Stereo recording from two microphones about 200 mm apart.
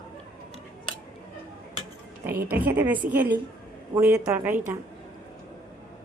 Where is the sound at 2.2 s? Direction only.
10° right (ahead or behind).